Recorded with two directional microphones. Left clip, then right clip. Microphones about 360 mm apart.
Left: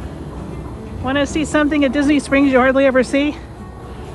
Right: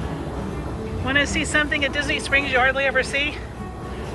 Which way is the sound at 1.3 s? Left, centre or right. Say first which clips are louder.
Left 4 dB; centre.